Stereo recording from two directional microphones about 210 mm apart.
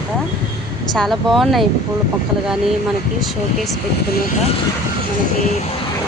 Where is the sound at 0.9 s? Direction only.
Centre (ahead or behind).